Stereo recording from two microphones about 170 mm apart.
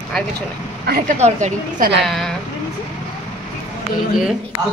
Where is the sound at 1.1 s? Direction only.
40° right (ahead or behind).